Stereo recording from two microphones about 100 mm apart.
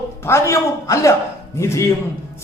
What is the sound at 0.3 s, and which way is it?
Speech, 30° left (ahead or behind).